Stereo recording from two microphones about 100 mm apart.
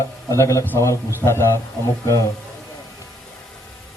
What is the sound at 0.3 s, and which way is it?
A man's voice, 30° left (ahead or behind).